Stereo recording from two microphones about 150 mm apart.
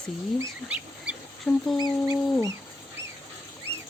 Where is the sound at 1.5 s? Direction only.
15° left (ahead or behind).